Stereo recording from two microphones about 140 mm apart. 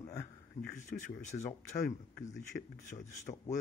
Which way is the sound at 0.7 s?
60° left (ahead or behind).